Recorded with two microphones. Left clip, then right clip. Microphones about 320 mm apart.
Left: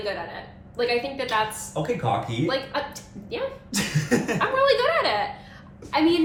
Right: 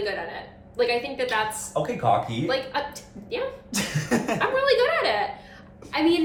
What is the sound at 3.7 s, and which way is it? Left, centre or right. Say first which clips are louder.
Speech: left 1 dB; centre.